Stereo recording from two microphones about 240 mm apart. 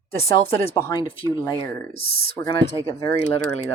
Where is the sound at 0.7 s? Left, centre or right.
Centre.